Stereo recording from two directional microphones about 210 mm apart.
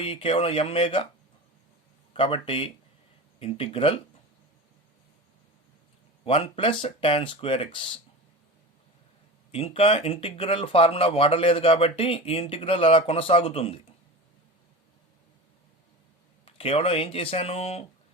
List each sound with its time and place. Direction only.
0.0 s speech: 25° left (ahead or behind)
2.1 s speech: 25° left (ahead or behind)
6.2 s speech: 25° left (ahead or behind)
9.5 s speech: 25° left (ahead or behind)
16.5 s speech: 25° left (ahead or behind)